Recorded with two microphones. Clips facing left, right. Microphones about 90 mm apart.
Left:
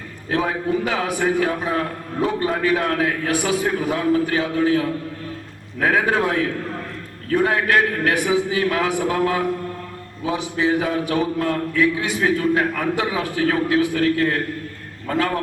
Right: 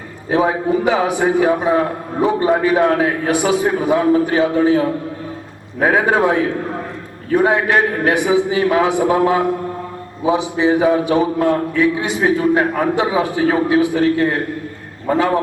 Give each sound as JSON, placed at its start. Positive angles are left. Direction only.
{"t": 0.3, "sound": "a man's voice", "side_deg": -20}